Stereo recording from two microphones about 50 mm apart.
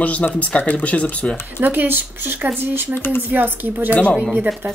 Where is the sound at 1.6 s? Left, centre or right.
Right.